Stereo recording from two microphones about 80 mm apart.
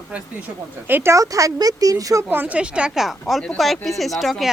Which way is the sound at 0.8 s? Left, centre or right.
Right.